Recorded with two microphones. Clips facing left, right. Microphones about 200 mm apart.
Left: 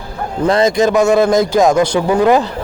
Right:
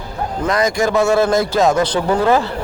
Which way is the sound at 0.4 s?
30° left (ahead or behind).